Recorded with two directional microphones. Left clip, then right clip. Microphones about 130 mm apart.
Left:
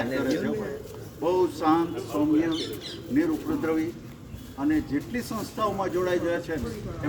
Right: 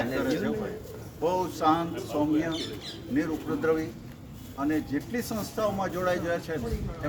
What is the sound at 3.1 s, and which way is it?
Speech, 20° right (ahead or behind).